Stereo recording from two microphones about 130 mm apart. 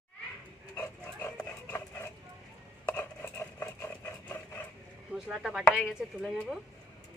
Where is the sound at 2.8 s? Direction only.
15° left (ahead or behind).